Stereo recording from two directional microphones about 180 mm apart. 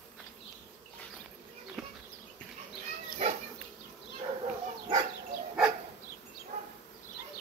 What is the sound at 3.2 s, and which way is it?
Insect, 35° right (ahead or behind).